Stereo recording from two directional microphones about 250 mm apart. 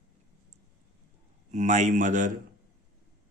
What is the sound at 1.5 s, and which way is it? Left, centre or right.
Speech, right.